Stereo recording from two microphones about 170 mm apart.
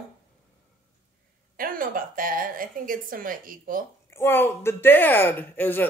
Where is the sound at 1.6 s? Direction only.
55° right (ahead or behind).